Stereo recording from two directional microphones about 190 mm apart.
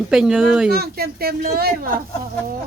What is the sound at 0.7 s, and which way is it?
Speech, 55° right (ahead or behind).